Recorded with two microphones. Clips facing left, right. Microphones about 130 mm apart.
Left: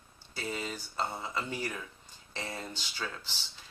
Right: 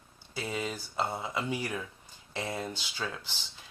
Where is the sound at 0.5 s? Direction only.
15° right (ahead or behind).